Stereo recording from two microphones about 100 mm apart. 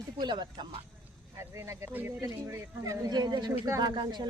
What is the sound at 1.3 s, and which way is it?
Speech, 30° right (ahead or behind).